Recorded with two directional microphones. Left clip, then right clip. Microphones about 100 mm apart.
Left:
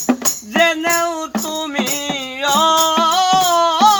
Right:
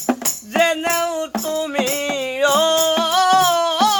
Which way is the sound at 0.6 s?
30° right (ahead or behind).